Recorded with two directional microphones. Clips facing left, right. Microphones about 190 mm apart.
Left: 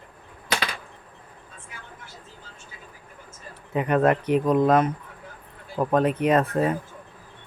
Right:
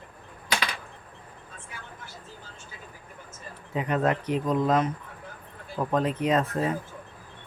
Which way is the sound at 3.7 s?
60° left (ahead or behind).